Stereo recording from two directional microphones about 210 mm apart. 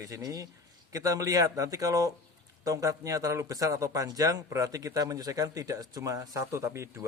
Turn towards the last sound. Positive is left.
turn(degrees=-10)  # may be behind; listen again after turning